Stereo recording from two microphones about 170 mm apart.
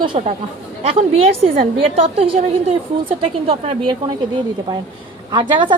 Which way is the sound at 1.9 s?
35° right (ahead or behind).